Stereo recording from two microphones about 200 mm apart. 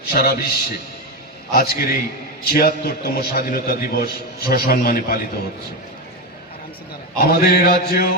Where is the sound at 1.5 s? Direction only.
50° left (ahead or behind).